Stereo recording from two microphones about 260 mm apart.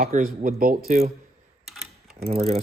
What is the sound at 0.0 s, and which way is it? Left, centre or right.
Speech, right.